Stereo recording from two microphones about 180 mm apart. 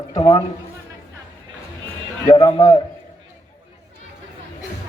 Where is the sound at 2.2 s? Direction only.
25° left (ahead or behind).